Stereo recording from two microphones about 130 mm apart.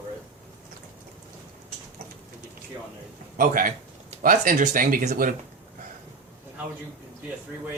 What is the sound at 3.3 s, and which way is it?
Speech, 90° right.